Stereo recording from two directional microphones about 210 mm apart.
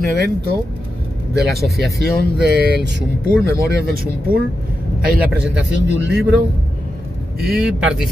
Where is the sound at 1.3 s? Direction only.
50° right (ahead or behind).